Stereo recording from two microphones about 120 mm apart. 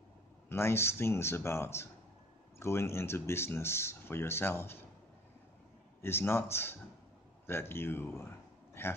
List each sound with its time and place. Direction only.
0.5 s speech: 20° left (ahead or behind)
6.0 s speech: 20° left (ahead or behind)
8.8 s a sound: 20° left (ahead or behind)